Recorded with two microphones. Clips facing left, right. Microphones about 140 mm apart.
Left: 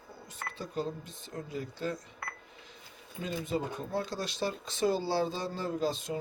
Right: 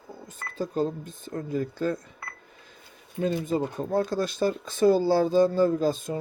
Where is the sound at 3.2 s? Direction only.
45° right (ahead or behind).